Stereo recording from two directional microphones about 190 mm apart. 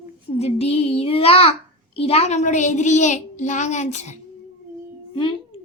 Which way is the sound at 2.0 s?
30° left (ahead or behind).